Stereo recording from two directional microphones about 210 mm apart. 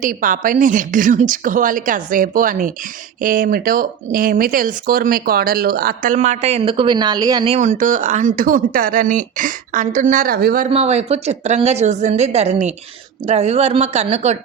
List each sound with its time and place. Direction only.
0.0 s speech: 40° right (ahead or behind); by 7.5 s 20° right (ahead or behind)
7.5 s speech: 35° right (ahead or behind)
10.7 s speech: 30° right (ahead or behind)